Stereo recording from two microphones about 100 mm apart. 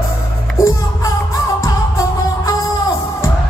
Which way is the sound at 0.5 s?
30° left (ahead or behind).